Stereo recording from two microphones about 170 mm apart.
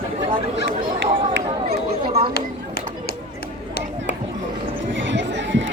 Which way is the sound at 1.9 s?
35° right (ahead or behind).